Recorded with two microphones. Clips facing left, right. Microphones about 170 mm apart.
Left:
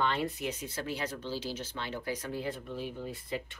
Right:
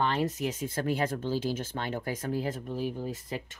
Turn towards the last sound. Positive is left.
turn(degrees=-45)  # may be behind; listen again after turning